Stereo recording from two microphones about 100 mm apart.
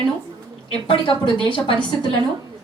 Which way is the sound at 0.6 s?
60° left (ahead or behind).